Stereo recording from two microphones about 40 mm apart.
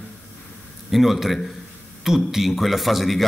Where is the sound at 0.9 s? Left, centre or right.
Centre.